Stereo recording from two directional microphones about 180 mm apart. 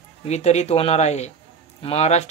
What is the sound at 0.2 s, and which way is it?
Speech, 40° left (ahead or behind).